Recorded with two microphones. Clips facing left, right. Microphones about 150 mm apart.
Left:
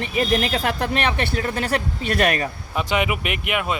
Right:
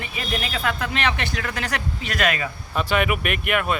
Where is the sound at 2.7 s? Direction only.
15° left (ahead or behind).